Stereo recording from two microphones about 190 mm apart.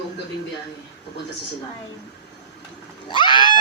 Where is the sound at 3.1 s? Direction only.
25° left (ahead or behind).